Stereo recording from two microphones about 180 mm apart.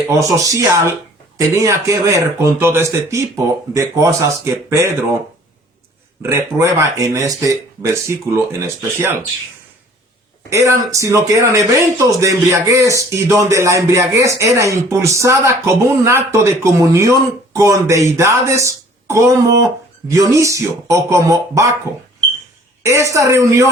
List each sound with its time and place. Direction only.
0.3 s speech: 20° right (ahead or behind)
6.2 s speech: 15° right (ahead or behind)
10.5 s speech: 15° right (ahead or behind)
22.8 s speech: 15° right (ahead or behind)